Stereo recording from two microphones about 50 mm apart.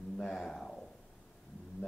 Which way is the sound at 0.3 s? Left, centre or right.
Centre.